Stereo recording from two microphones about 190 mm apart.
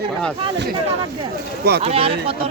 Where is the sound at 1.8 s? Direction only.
30° right (ahead or behind).